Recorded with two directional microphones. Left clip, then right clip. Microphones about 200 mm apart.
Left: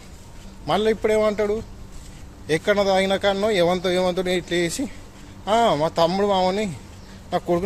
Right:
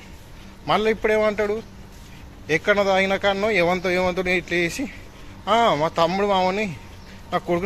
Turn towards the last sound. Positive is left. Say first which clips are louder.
# left 1 dB
turn(degrees=15)  # may be behind; listen again after turning